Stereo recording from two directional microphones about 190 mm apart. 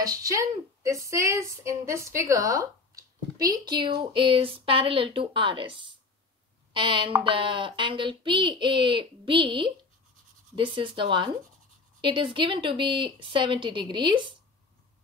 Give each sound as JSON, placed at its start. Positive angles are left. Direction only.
{"t": 0.0, "sound": "a woman's voice", "side_deg": -20}